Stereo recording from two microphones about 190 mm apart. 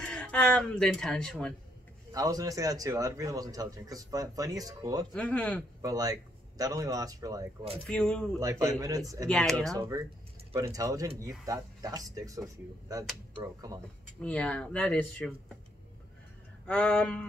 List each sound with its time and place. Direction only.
0.0 s speech: 5° left (ahead or behind)
2.1 s a man's voice: 20° right (ahead or behind)
5.1 s speech: 5° left (ahead or behind)
5.8 s a man's voice: 20° right (ahead or behind)
7.9 s speech: 5° left (ahead or behind)
8.4 s a man's voice: 20° right (ahead or behind)
9.3 s speech: 5° left (ahead or behind)
9.8 s a man's voice: 15° right (ahead or behind)
14.2 s speech: 5° left (ahead or behind)
16.6 s speech: 5° left (ahead or behind)